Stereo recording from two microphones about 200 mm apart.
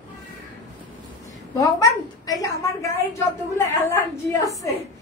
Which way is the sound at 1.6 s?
15° left (ahead or behind).